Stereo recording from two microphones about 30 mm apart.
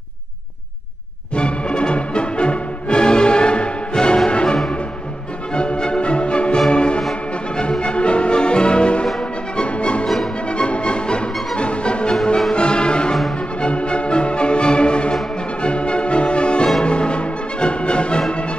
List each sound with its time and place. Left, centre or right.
1.3 s music: left